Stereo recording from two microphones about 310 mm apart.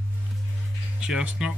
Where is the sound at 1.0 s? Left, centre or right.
Centre.